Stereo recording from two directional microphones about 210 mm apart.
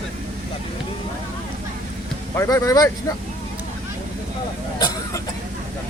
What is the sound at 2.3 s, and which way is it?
Speech, 15° left (ahead or behind).